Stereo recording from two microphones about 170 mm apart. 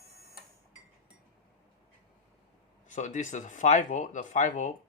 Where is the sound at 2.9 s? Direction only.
45° left (ahead or behind).